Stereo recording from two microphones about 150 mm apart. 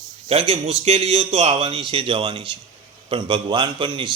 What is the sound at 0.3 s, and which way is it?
A man's voice, 40° right (ahead or behind).